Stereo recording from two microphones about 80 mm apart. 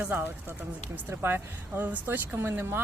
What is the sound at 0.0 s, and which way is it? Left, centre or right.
Speech, right.